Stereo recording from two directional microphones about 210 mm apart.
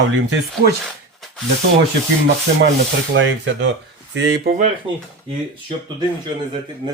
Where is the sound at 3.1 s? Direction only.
60° right (ahead or behind).